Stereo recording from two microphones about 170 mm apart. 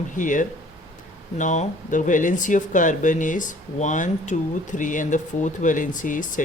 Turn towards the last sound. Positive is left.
turn(degrees=50)  # may be behind; listen again after turning